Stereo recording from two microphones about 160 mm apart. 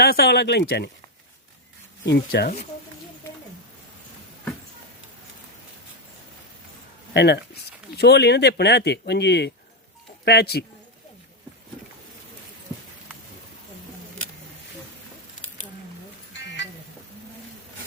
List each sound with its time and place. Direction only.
0.0 s speech: 75° left (ahead or behind)
2.0 s speech: 75° left (ahead or behind)
7.1 s speech: 90° left
16.4 s music: 90° left